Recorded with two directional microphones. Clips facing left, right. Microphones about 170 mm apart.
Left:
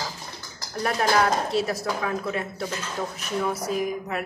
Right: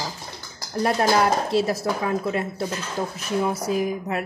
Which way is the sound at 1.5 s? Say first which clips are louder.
Right 3 dB; 30° right (ahead or behind).